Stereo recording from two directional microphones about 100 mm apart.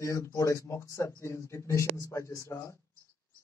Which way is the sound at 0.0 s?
30° left (ahead or behind).